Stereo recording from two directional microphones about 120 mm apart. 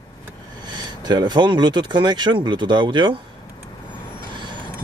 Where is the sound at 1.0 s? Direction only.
35° right (ahead or behind).